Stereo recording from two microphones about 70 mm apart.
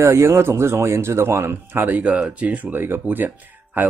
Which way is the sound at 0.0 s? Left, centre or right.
Right.